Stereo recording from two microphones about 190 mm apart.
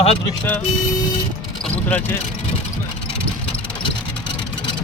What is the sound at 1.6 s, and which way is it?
Vehicle, 5° left (ahead or behind).